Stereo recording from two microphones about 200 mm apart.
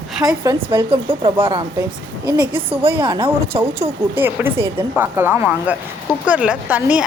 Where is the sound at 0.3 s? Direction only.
15° right (ahead or behind).